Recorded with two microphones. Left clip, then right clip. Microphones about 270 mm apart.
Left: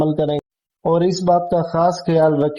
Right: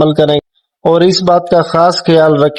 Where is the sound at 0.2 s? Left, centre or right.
Right.